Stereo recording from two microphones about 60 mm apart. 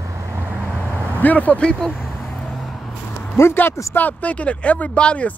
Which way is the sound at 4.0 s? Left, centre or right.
Left.